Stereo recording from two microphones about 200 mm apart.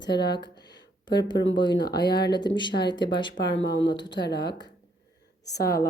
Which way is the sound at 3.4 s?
60° left (ahead or behind).